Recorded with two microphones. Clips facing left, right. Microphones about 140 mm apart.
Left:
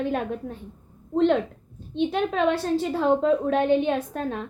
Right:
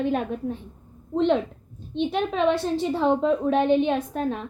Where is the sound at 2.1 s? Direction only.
5° left (ahead or behind).